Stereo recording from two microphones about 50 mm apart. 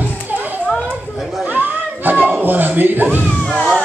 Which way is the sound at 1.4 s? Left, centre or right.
Right.